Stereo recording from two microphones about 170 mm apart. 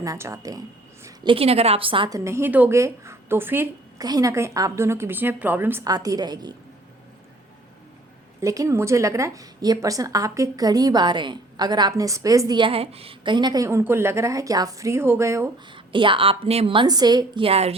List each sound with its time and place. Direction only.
0.0 s a woman's voice: 20° right (ahead or behind)
8.4 s a woman's voice: 20° right (ahead or behind)
15.7 s a woman's voice: 30° right (ahead or behind)